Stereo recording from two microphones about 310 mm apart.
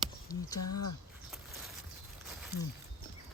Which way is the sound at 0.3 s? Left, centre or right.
Centre.